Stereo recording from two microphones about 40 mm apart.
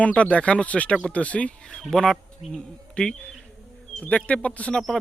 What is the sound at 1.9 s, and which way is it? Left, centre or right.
Speech, centre.